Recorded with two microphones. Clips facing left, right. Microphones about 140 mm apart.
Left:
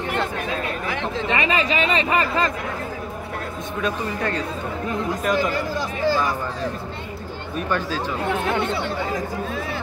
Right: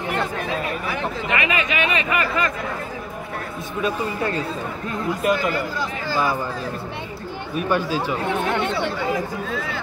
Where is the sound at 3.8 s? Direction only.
10° right (ahead or behind).